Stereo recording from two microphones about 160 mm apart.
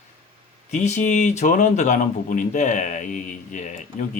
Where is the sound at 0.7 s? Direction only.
45° left (ahead or behind).